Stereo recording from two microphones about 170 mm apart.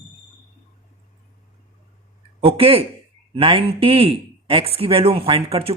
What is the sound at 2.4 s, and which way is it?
A man's voice, 35° right (ahead or behind).